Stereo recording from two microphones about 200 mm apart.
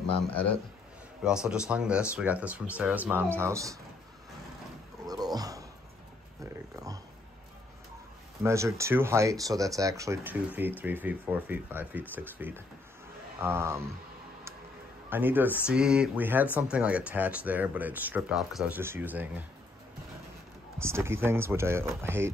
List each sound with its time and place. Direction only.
0.2 s speech: 5° left (ahead or behind)
1.2 s speech: 5° right (ahead or behind)
5.0 s dog: 20° right (ahead or behind)
8.4 s speech: 15° right (ahead or behind)
15.0 s speech: 10° right (ahead or behind)
20.8 s speech: 10° right (ahead or behind)